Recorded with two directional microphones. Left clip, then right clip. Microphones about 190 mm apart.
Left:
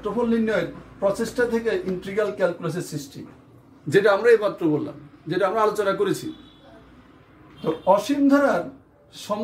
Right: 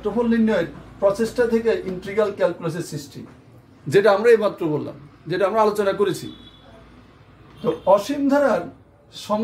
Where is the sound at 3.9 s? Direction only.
20° right (ahead or behind).